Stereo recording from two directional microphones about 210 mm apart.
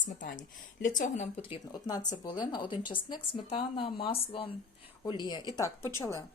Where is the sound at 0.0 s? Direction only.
40° left (ahead or behind).